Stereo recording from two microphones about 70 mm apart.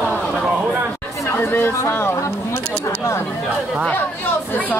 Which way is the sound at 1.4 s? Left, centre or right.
Left.